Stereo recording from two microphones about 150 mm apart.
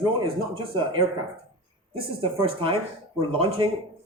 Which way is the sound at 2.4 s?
35° right (ahead or behind).